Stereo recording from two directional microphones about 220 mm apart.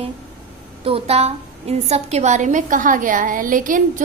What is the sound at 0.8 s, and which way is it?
A woman's voice, 25° right (ahead or behind).